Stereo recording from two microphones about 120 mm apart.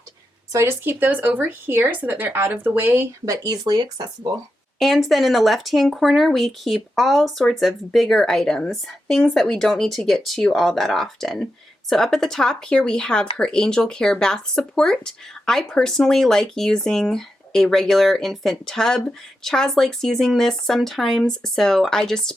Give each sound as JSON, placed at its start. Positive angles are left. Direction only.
{"t": 0.5, "sound": "speech", "side_deg": -20}
{"t": 3.4, "sound": "speech", "side_deg": -35}
{"t": 4.8, "sound": "speech", "side_deg": 0}